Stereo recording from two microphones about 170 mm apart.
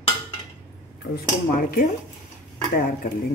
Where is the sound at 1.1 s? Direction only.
60° left (ahead or behind).